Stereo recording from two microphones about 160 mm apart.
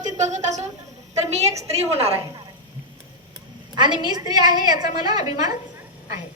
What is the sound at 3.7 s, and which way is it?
A woman's voice, 25° right (ahead or behind).